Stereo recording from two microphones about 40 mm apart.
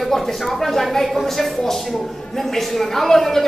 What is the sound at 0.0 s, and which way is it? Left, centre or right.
A woman's voice, centre.